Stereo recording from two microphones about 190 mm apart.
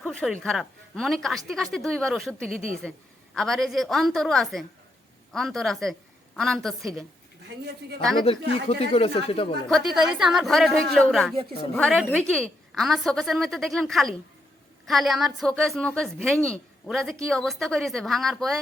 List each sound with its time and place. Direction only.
0.0 s a woman's voice: 5° left (ahead or behind)
7.4 s speech: 60° right (ahead or behind)
8.4 s speech: 30° left (ahead or behind)
9.6 s a woman's voice: centre (ahead or behind)